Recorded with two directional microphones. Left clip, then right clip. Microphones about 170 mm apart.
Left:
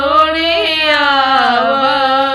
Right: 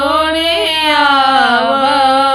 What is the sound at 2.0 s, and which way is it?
Music, 30° right (ahead or behind).